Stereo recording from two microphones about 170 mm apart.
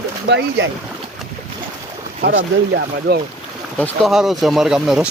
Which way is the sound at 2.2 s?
75° right (ahead or behind).